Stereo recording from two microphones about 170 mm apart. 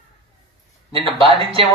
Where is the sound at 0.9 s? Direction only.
35° right (ahead or behind).